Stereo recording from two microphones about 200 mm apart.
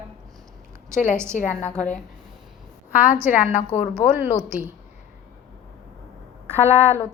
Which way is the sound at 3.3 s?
35° left (ahead or behind).